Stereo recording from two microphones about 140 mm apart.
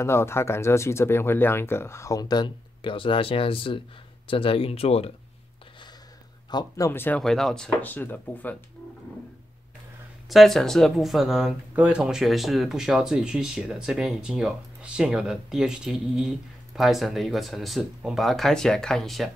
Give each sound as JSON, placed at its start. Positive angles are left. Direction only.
{"t": 0.0, "sound": "speech", "side_deg": 20}
{"t": 6.5, "sound": "speech", "side_deg": 30}
{"t": 6.9, "sound": "speech", "side_deg": 15}
{"t": 10.3, "sound": "speech", "side_deg": 0}